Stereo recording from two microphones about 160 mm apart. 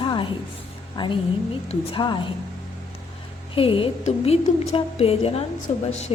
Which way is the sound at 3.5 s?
35° left (ahead or behind).